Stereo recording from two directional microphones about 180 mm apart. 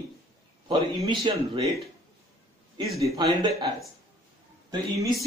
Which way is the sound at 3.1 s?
20° right (ahead or behind).